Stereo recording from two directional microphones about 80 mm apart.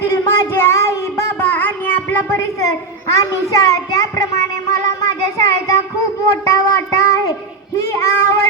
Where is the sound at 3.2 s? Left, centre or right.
Left.